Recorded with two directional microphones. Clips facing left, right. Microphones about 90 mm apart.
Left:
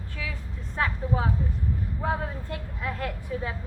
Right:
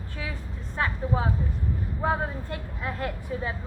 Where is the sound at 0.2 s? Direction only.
40° right (ahead or behind).